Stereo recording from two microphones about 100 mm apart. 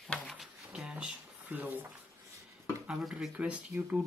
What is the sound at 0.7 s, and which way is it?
Speech, 10° right (ahead or behind).